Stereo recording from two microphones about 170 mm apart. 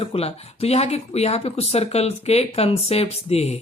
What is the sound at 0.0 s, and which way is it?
Speech, 35° left (ahead or behind).